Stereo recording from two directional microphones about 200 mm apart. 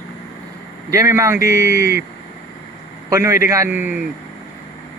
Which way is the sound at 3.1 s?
15° right (ahead or behind).